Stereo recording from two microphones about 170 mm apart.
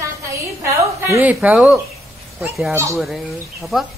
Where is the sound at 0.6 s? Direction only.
15° right (ahead or behind).